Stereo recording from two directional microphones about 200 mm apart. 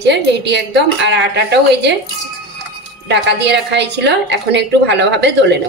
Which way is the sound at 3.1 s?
60° right (ahead or behind).